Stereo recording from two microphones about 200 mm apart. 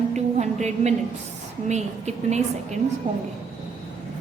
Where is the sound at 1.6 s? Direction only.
35° right (ahead or behind).